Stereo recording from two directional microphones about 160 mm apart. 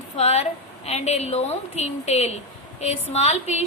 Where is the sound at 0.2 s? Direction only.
40° left (ahead or behind).